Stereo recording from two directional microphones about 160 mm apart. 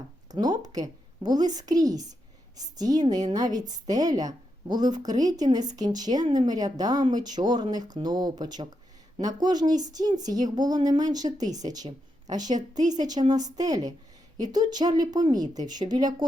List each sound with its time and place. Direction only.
0.3 s a woman's voice: 25° right (ahead or behind)
12.9 s a woman's voice: 25° right (ahead or behind)